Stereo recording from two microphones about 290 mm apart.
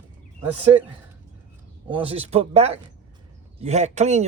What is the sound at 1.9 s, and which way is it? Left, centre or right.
Speech, centre.